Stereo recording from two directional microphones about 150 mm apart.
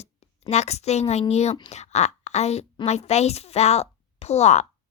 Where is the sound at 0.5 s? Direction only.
45° left (ahead or behind).